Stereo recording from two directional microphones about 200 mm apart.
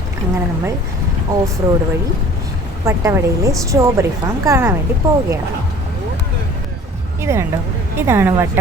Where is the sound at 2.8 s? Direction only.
15° right (ahead or behind).